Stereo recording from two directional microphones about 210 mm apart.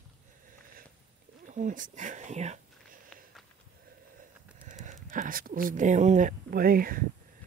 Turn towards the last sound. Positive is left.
turn(degrees=-45)  # may be behind; listen again after turning